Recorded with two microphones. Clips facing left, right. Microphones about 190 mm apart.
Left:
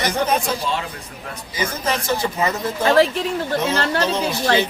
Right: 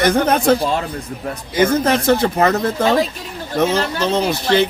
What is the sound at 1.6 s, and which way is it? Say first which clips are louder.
Speech: right 9 dB; 60° right (ahead or behind).